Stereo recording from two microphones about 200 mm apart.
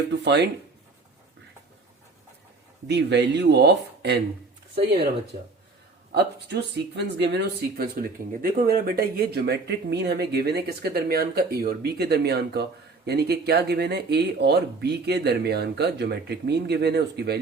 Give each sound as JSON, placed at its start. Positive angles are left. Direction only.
{"t": 0.1, "sound": "speech", "side_deg": -60}
{"t": 2.8, "sound": "speech", "side_deg": -60}
{"t": 6.1, "sound": "speech", "side_deg": -55}